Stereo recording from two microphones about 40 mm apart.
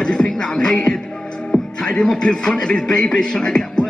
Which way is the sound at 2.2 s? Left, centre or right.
Left.